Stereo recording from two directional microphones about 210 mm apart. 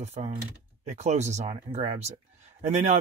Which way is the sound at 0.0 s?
30° right (ahead or behind).